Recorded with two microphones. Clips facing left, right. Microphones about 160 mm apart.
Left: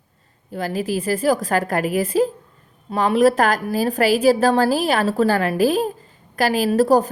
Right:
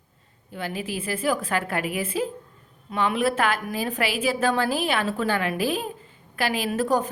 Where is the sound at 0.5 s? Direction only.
40° left (ahead or behind).